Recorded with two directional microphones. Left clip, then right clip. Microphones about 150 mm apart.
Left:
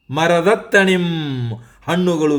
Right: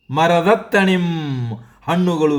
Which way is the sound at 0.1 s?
15° left (ahead or behind).